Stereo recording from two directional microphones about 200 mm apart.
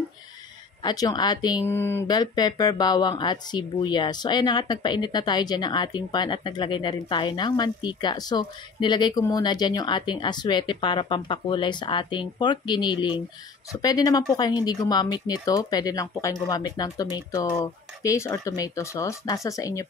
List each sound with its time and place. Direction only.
0.8 s speech: 20° left (ahead or behind)